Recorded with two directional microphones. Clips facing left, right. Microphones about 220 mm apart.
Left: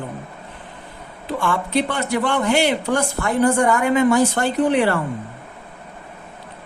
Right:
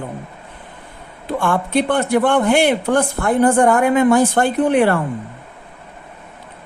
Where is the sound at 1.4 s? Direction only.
55° right (ahead or behind).